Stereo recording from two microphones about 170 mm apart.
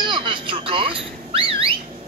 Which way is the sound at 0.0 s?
25° right (ahead or behind).